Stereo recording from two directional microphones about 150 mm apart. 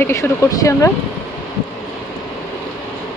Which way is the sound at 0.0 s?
20° left (ahead or behind).